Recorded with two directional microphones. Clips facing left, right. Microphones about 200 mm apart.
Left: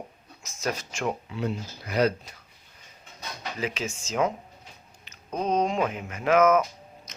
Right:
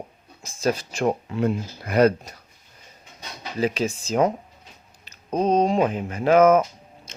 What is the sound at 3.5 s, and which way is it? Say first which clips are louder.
Speech: right 9 dB; 35° right (ahead or behind).